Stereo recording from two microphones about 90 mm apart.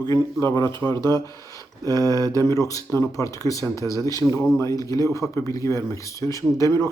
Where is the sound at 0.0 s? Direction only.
40° left (ahead or behind).